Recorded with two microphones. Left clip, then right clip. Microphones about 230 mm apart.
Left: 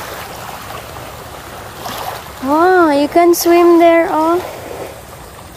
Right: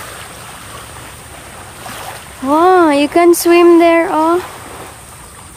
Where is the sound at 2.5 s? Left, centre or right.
Centre.